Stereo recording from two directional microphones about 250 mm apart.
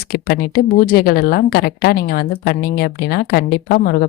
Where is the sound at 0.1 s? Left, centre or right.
Left.